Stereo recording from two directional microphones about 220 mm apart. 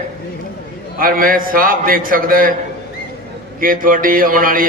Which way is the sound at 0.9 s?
40° right (ahead or behind).